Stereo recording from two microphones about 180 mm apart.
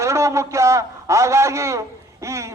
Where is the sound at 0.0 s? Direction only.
15° right (ahead or behind).